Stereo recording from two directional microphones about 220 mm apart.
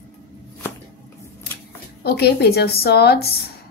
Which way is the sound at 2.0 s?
45° left (ahead or behind).